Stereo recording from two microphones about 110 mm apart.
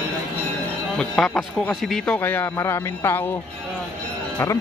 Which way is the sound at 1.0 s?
5° left (ahead or behind).